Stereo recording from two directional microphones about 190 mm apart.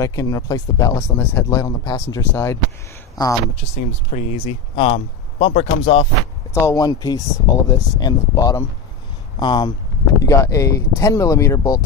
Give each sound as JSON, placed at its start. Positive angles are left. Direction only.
{"t": 0.0, "sound": "speech", "side_deg": 15}
{"t": 3.5, "sound": "speech", "side_deg": 35}
{"t": 6.5, "sound": "speech", "side_deg": 15}